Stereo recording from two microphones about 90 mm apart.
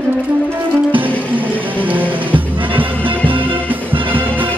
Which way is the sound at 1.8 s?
20° right (ahead or behind).